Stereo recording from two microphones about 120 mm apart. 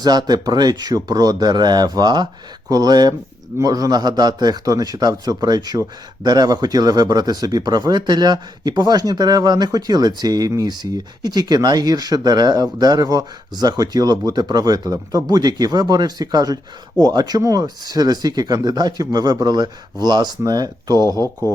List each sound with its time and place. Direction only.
0.0 s speech: 35° right (ahead or behind)